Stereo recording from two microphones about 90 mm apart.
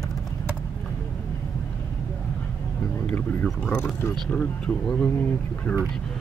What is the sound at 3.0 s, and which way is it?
Speech, 15° left (ahead or behind).